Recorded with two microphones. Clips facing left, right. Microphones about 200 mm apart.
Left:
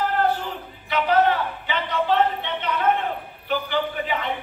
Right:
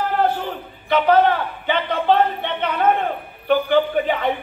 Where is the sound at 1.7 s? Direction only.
60° right (ahead or behind).